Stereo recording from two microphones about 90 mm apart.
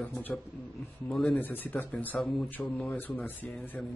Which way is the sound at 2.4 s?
20° left (ahead or behind).